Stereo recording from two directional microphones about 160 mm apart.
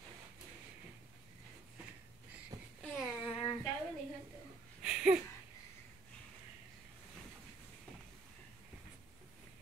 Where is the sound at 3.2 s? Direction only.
35° left (ahead or behind).